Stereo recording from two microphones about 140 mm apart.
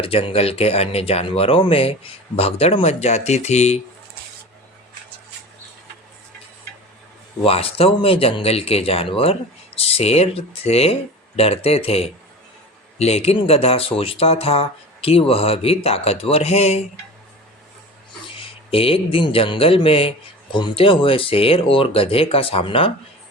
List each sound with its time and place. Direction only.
0.0 s speech: 40° left (ahead or behind)
7.4 s speech: 45° left (ahead or behind)
18.3 s speech: 40° left (ahead or behind)